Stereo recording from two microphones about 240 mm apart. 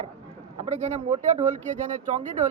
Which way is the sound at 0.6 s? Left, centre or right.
Right.